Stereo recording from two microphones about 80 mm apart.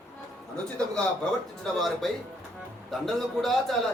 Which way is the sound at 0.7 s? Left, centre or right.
Centre.